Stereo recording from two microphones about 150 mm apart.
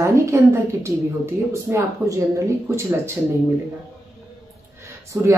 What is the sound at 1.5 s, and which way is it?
Speech, 20° right (ahead or behind).